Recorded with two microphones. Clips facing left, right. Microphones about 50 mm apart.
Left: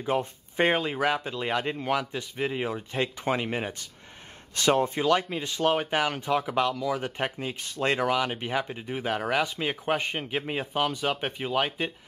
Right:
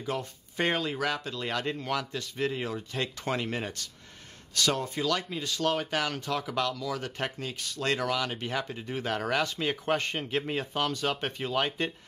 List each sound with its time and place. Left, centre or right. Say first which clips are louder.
0.0 s speech: left 6 dB; left